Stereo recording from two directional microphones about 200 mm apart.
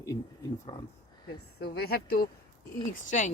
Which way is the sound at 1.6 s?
50° left (ahead or behind).